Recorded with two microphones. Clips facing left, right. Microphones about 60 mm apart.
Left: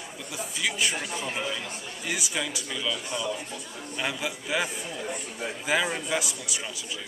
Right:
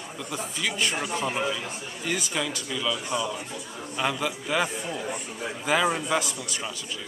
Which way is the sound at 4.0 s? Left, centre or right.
Centre.